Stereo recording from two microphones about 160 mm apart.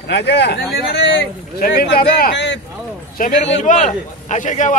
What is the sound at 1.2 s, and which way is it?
Speech, 70° left (ahead or behind).